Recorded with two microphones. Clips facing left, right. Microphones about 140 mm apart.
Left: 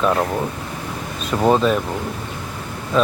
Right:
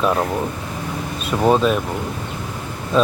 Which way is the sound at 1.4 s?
Centre (ahead or behind).